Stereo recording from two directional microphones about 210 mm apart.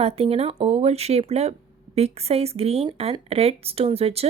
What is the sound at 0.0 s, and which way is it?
A woman's voice, 30° right (ahead or behind).